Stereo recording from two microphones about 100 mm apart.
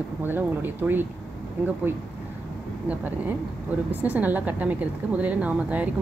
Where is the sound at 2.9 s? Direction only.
15° right (ahead or behind).